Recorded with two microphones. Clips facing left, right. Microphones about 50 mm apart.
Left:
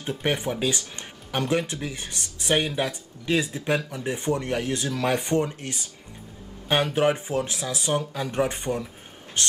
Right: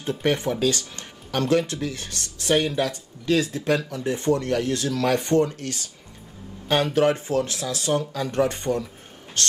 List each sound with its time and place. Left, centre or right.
0.0 s speech: centre
9.4 s music: left